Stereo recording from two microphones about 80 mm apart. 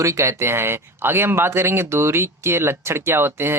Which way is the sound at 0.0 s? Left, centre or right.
Right.